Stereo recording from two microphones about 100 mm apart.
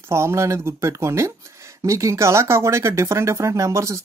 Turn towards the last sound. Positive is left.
turn(degrees=-30)  # may be behind; listen again after turning